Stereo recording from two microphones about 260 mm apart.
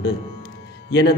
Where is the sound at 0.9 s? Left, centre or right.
Left.